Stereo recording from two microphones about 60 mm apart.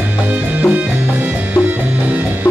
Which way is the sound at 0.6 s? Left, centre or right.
Right.